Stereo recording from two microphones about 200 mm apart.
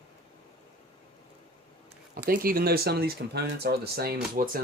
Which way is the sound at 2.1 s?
45° right (ahead or behind).